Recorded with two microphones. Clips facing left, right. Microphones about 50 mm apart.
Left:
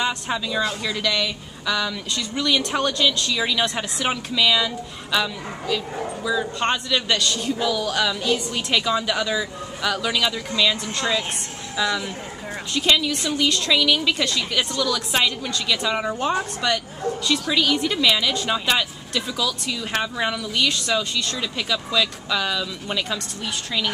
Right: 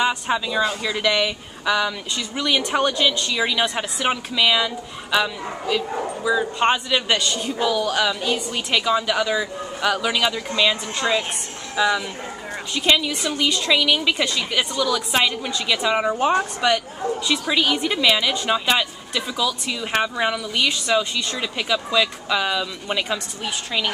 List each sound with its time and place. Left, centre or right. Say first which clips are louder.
0.0 s speech: right 3 dB; centre